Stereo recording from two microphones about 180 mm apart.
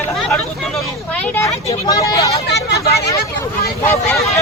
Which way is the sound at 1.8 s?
20° left (ahead or behind).